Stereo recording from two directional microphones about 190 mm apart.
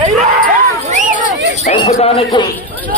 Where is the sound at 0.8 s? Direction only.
45° right (ahead or behind).